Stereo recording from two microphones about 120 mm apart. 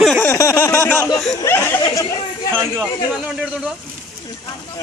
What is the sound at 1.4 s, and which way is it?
Speech, 20° left (ahead or behind).